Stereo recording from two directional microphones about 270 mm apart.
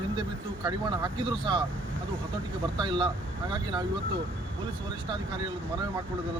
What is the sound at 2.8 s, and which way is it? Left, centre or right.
Speech, centre.